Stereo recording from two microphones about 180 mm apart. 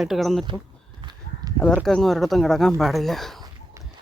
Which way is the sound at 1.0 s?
25° right (ahead or behind).